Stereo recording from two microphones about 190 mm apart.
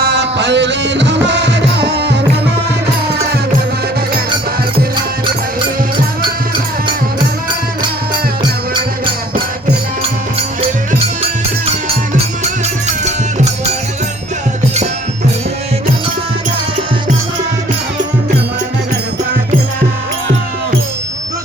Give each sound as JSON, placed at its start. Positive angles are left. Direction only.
{"t": 0.0, "sound": "music", "side_deg": -65}